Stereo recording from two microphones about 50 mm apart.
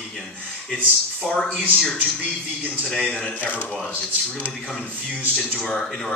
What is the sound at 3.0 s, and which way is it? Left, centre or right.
Speech, left.